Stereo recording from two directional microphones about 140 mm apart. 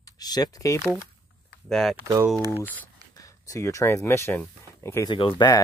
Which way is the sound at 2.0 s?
25° right (ahead or behind).